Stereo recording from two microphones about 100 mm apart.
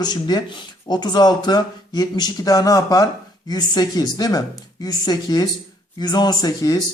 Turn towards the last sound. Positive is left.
turn(degrees=40)  # may be behind; listen again after turning